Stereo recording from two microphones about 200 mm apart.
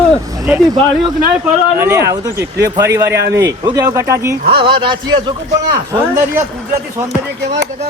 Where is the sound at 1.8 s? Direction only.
15° right (ahead or behind).